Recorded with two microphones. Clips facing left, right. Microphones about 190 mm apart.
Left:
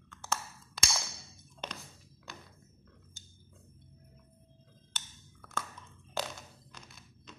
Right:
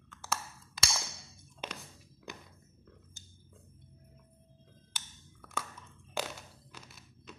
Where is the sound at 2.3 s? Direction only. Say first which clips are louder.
Right 3 dB; 20° right (ahead or behind).